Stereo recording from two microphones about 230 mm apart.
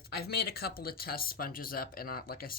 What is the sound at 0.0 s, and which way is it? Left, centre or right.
Speech, left.